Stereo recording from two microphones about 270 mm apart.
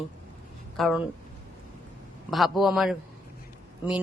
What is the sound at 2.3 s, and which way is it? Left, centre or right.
Speech, centre.